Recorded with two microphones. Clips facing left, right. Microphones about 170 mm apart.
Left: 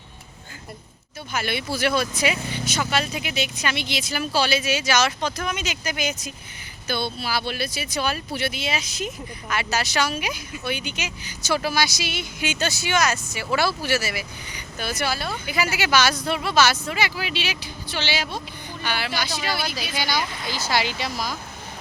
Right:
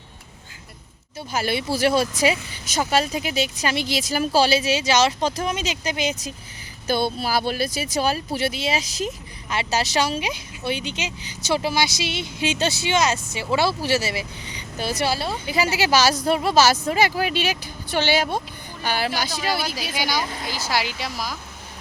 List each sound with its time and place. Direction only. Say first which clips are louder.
1.3 s speech: right 3 dB; 35° right (ahead or behind)
6.8 s speech: right 5 dB; 45° right (ahead or behind)
19.9 s speech: right 1 dB; 10° right (ahead or behind)